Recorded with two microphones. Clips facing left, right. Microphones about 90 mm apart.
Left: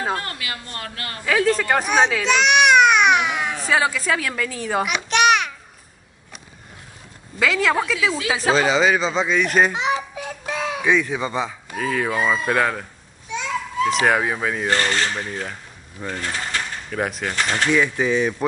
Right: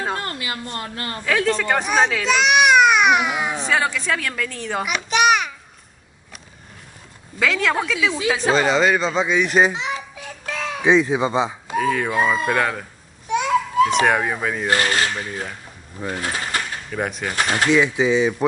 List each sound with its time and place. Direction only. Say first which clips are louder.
0.2 s a woman's voice: right 3 dB; 30° right (ahead or behind)
1.2 s speech: left 1 dB; 5° left (ahead or behind)
7.3 s speech: left 1 dB; centre (ahead or behind)
10.4 s music: left 1 dB; 5° left (ahead or behind)
10.8 s speech: right 5 dB; 20° right (ahead or behind)
11.7 s speech: right 2 dB; centre (ahead or behind)
13.3 s children playing: right 7 dB; 55° right (ahead or behind)
14.0 s speech: even; centre (ahead or behind)